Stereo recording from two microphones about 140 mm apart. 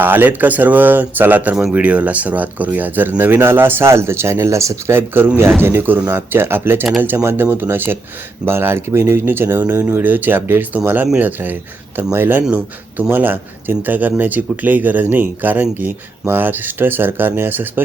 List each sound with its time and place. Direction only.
0.0 s speech: 15° right (ahead or behind)